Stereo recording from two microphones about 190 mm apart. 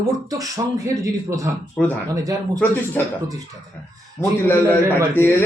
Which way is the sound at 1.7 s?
10° left (ahead or behind).